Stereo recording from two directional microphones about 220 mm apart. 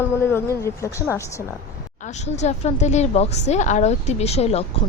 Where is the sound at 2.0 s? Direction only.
30° left (ahead or behind).